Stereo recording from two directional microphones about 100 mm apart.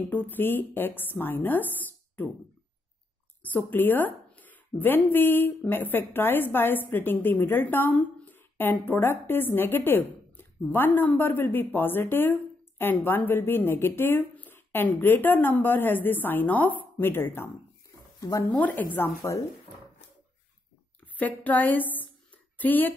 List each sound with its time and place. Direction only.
0.1 s a woman's voice: 20° left (ahead or behind)
3.4 s a woman's voice: 20° left (ahead or behind)
18.5 s a woman's voice: 15° left (ahead or behind)
21.2 s a woman's voice: 15° left (ahead or behind)